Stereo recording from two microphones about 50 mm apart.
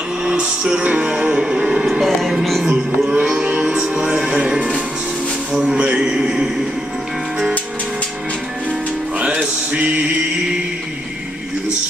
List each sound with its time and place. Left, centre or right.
0.2 s music: centre
3.1 s music: centre
5.5 s a sound: centre
9.2 s music: right
9.8 s mantra: right